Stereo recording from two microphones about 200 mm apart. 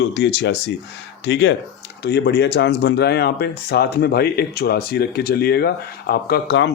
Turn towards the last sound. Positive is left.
turn(degrees=60)  # may be behind; listen again after turning